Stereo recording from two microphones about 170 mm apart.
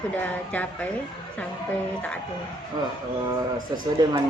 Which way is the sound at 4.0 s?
20° right (ahead or behind).